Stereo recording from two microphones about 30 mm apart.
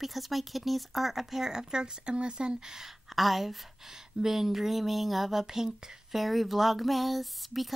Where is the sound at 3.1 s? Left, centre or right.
Centre.